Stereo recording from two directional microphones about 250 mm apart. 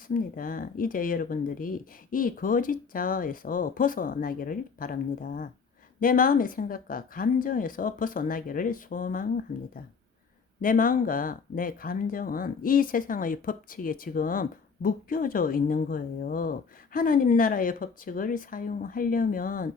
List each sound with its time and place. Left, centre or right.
0.1 s speech: left
10.6 s speech: left